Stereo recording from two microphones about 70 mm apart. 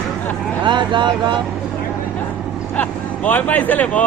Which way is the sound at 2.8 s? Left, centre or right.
Left.